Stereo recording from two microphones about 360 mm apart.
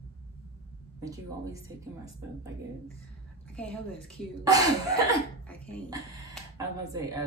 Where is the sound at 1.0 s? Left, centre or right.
Centre.